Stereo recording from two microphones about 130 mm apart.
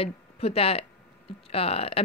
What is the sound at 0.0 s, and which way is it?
A woman's voice, 50° left (ahead or behind).